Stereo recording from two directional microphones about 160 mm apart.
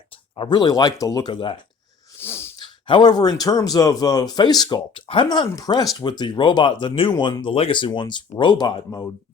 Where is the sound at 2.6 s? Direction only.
30° left (ahead or behind).